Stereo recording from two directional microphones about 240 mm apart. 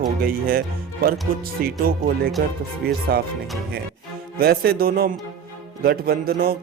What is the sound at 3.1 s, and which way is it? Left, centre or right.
Speech, right.